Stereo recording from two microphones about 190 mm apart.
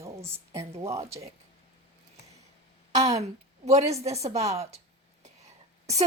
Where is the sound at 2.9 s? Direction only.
35° right (ahead or behind).